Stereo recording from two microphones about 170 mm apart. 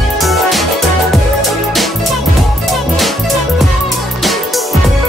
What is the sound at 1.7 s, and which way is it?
Music, centre (ahead or behind).